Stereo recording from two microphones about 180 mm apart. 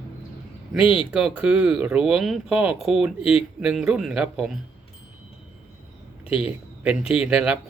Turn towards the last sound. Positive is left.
turn(degrees=-5)  # may be behind; listen again after turning